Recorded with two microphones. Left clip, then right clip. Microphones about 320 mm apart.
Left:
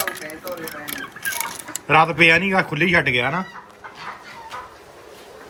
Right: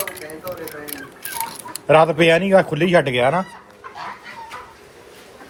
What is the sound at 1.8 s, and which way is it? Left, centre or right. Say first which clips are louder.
Speech: right 1 dB; centre.